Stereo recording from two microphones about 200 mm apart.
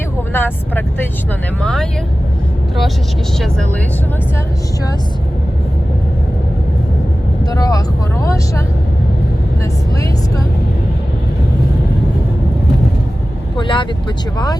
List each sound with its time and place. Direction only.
0.3 s speech: 10° left (ahead or behind)
7.5 s speech: 20° left (ahead or behind)
13.6 s speech: 25° left (ahead or behind)